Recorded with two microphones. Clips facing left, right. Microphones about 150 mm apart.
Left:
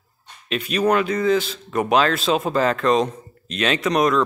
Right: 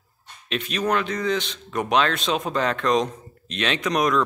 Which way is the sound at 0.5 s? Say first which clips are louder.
Left 5 dB; 5° left (ahead or behind).